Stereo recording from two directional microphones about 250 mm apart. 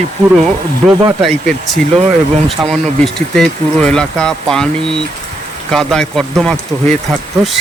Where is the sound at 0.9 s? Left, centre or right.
Centre.